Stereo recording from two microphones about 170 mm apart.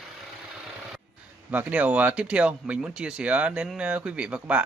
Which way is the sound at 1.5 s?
10° right (ahead or behind).